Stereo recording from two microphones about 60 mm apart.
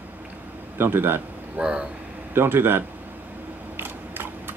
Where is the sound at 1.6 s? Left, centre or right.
Centre.